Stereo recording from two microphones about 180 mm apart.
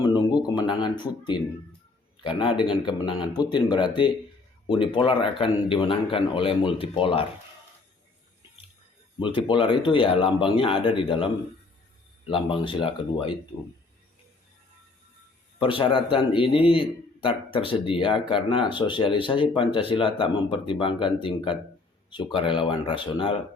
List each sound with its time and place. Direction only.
0.0 s speech: 25° left (ahead or behind)
9.1 s speech: 25° left (ahead or behind)
15.6 s speech: 30° left (ahead or behind)